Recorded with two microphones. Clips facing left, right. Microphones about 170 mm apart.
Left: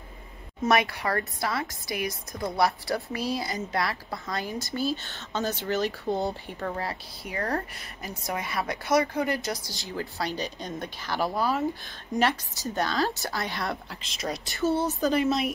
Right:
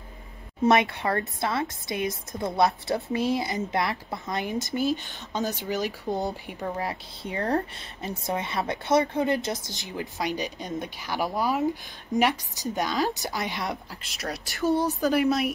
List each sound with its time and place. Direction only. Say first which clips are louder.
0.6 s a woman's voice: right 3 dB; 20° right (ahead or behind); by 15.5 s 5° right (ahead or behind)